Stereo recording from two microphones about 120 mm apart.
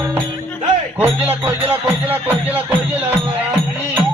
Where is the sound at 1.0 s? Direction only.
20° right (ahead or behind).